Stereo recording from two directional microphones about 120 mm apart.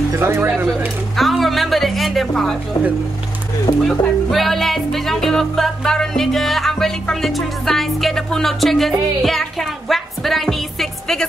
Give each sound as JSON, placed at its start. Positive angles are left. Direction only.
{"t": 0.1, "sound": "speech", "side_deg": -20}
{"t": 1.1, "sound": "music", "side_deg": 0}
{"t": 3.8, "sound": "music", "side_deg": 0}